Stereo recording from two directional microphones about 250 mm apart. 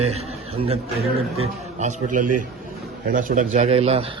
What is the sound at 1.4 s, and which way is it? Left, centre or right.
A man's voice, right.